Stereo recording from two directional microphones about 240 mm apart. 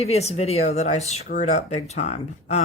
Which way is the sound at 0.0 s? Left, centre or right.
Left.